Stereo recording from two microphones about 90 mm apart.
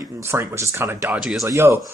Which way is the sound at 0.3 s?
30° right (ahead or behind).